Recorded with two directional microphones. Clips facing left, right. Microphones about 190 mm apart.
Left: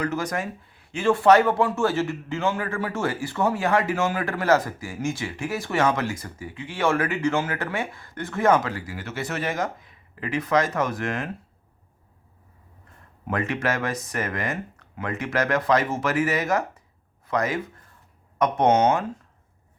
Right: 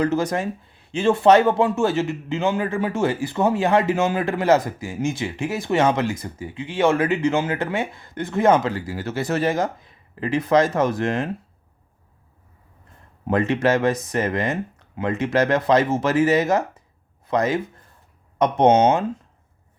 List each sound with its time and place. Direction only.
0.0 s speech: 25° right (ahead or behind)
13.2 s speech: 25° right (ahead or behind)